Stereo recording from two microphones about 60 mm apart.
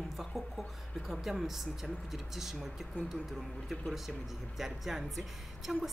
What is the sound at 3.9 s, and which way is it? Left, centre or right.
A woman's voice, centre.